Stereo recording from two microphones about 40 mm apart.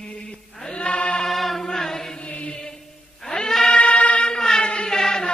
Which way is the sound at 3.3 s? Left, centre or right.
Centre.